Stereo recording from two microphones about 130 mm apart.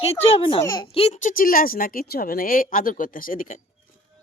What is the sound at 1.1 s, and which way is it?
Speech, 85° left.